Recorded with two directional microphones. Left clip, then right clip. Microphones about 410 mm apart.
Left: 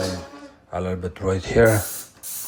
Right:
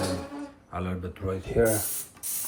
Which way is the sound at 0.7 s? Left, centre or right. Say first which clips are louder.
Left 9 dB; centre.